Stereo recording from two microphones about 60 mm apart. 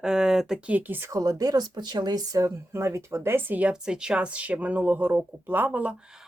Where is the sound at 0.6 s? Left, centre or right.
Right.